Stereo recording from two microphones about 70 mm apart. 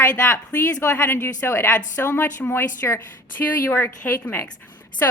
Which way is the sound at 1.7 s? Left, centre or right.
Left.